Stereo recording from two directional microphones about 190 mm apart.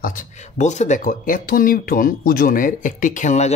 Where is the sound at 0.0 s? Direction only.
45° left (ahead or behind).